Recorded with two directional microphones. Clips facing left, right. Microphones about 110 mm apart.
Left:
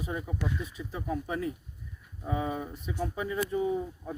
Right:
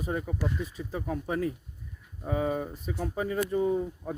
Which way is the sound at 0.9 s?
50° right (ahead or behind).